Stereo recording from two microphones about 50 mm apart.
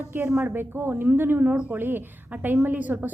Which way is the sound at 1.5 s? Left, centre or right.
Right.